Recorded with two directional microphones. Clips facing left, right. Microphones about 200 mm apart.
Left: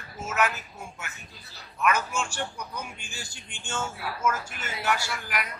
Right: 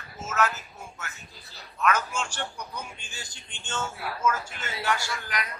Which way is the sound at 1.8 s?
10° left (ahead or behind).